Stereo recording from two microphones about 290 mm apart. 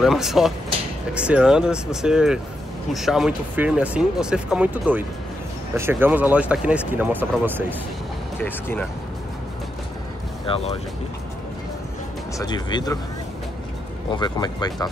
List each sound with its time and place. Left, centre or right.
0.0 s speech: centre
8.4 s speech: centre
10.4 s speech: centre
12.4 s speech: centre
14.1 s speech: centre